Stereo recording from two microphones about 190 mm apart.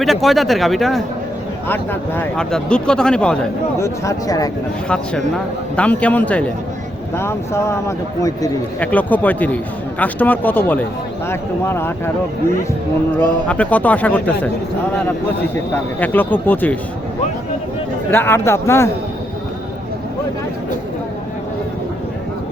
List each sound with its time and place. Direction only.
0.0 s speech: centre (ahead or behind)
1.6 s speech: 10° left (ahead or behind)
3.8 s speech: 15° left (ahead or behind)
4.9 s speech: 5° left (ahead or behind)
13.5 s speech: 10° left (ahead or behind)
16.0 s speech: 10° left (ahead or behind)
18.1 s speech: 10° left (ahead or behind)